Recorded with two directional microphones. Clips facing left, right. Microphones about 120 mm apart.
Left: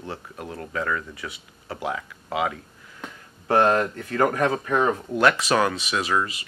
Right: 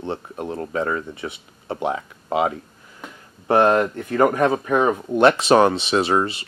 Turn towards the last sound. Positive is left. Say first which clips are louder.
# right 6 dB
turn(degrees=-30)  # may be behind; listen again after turning